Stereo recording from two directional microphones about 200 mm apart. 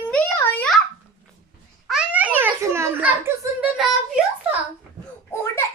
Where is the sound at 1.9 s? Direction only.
5° right (ahead or behind).